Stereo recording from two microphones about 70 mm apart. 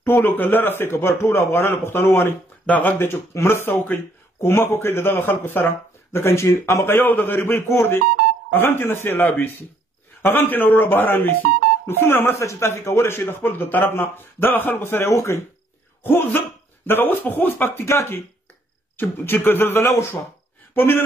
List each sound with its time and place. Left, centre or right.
0.0 s speech: left
2.6 s speech: left
3.0 s speech: left
7.1 s speech: left
10.2 s speech: left
12.4 s speech: left
16.0 s speech: left